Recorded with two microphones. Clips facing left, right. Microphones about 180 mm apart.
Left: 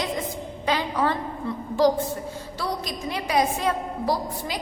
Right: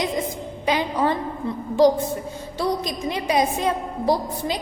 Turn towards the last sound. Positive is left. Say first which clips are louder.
# right 4 dB
turn(degrees=-20)  # may be behind; listen again after turning